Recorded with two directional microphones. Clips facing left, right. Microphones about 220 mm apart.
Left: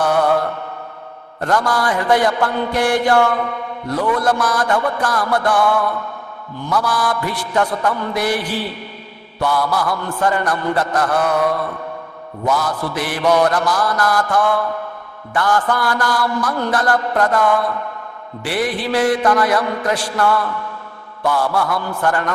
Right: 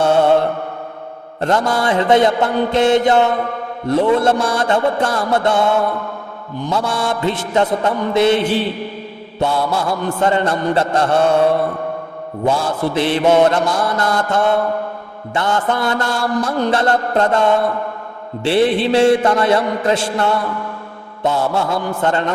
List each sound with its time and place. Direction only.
0.0 s mantra: 25° right (ahead or behind)